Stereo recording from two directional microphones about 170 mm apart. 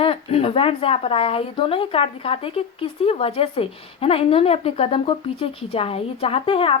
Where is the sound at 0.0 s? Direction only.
35° left (ahead or behind).